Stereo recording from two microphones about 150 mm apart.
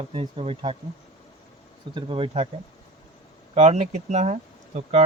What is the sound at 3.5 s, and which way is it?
Speech, 50° right (ahead or behind).